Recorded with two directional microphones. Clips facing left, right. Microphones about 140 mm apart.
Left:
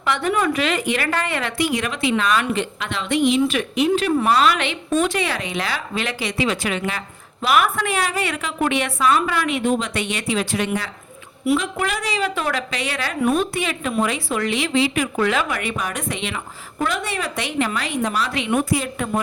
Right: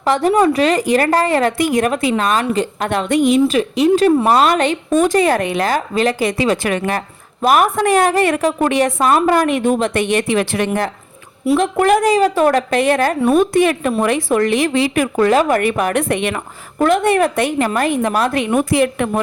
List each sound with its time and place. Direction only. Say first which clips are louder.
0.0 s a woman's voice: right 7 dB; 35° right (ahead or behind)
2.9 s a woman's voice: right 5 dB; 50° right (ahead or behind); by 19.2 s 65° right (ahead or behind)